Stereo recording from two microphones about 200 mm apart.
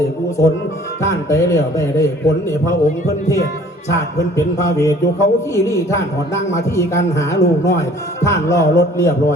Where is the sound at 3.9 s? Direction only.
15° left (ahead or behind).